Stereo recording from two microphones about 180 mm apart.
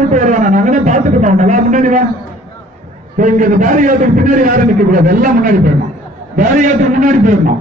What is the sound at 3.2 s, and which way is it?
A man's voice, 45° right (ahead or behind).